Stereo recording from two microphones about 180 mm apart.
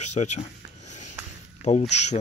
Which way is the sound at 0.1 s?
40° left (ahead or behind).